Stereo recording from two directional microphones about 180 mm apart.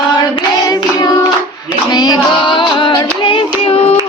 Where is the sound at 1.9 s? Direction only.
20° left (ahead or behind).